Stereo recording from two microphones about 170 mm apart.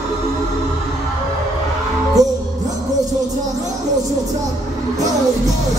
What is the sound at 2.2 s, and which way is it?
Music, 20° right (ahead or behind).